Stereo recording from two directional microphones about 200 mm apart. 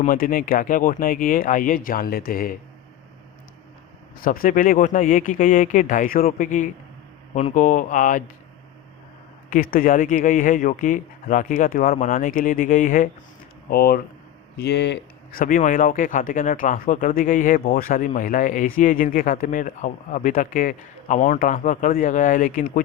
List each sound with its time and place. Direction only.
0.0 s speech: 45° left (ahead or behind)
4.2 s speech: 45° left (ahead or behind)
9.5 s speech: 45° left (ahead or behind)